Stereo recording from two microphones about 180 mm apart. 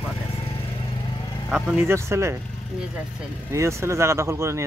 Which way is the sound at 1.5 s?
5° right (ahead or behind).